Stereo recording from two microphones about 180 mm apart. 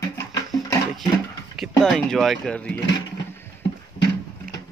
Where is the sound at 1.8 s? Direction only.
Centre (ahead or behind).